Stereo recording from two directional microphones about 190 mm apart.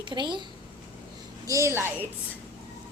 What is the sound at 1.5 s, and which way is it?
Speech, 15° right (ahead or behind).